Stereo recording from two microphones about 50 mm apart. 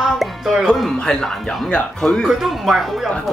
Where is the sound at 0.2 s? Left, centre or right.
Centre.